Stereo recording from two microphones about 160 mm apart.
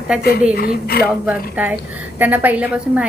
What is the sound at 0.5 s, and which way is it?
Speech, 70° left (ahead or behind).